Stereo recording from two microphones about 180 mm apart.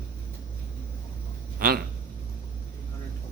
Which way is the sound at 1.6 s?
55° right (ahead or behind).